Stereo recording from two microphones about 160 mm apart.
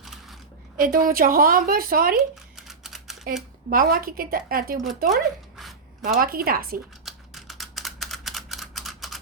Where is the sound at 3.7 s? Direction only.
65° right (ahead or behind).